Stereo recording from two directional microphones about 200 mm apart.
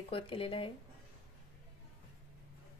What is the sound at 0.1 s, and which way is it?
Speech, 25° left (ahead or behind).